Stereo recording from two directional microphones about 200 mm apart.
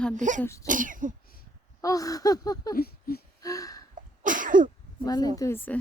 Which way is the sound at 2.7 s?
50° left (ahead or behind).